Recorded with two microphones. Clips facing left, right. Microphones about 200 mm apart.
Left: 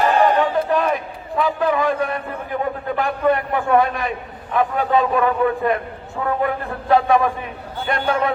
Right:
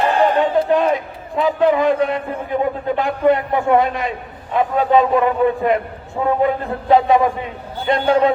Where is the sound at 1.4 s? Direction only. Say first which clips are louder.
Right 4 dB; 20° right (ahead or behind).